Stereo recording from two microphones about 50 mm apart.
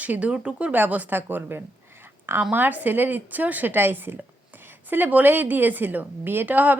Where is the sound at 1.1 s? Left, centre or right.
Right.